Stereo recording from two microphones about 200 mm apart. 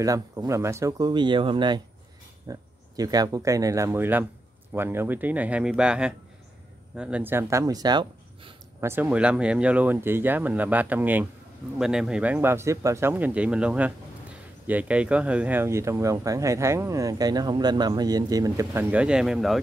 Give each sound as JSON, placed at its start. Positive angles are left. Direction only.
{"t": 0.0, "sound": "speech", "side_deg": -15}
{"t": 8.8, "sound": "speech", "side_deg": -10}